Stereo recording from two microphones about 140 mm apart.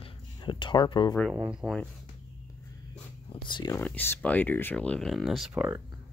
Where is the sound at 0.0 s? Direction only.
35° left (ahead or behind).